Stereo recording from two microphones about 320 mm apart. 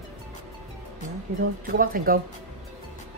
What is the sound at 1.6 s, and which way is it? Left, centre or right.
Speech, right.